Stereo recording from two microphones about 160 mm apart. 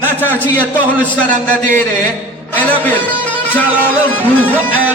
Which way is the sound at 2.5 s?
10° left (ahead or behind).